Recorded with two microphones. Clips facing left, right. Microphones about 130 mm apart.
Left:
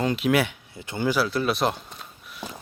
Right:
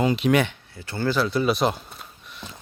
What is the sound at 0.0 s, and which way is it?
Speech, centre (ahead or behind).